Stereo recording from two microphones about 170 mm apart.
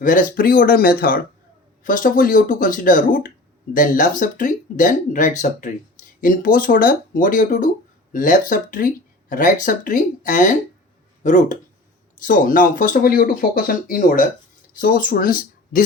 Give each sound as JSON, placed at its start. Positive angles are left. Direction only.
{"t": 0.0, "sound": "speech", "side_deg": 50}